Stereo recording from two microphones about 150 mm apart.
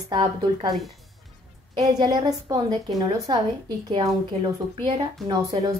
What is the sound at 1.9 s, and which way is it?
A woman's voice, 25° right (ahead or behind).